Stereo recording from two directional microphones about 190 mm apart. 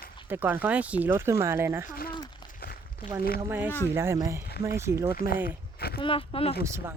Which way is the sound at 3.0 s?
25° left (ahead or behind).